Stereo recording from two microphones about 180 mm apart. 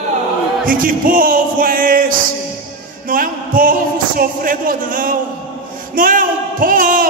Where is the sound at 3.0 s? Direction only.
50° right (ahead or behind).